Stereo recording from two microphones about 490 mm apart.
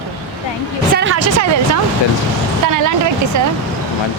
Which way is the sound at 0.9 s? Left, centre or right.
Right.